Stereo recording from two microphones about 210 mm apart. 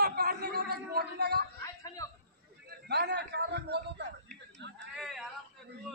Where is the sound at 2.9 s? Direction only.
55° right (ahead or behind).